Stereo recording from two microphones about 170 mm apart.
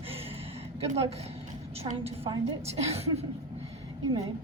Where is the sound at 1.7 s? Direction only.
35° right (ahead or behind).